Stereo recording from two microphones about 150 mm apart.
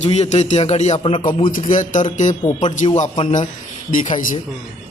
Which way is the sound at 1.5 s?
60° left (ahead or behind).